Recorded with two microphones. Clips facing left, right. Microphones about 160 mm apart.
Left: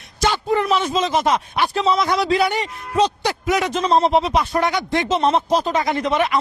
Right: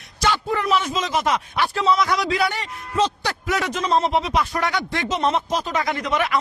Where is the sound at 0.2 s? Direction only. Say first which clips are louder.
Left 3 dB; 25° left (ahead or behind).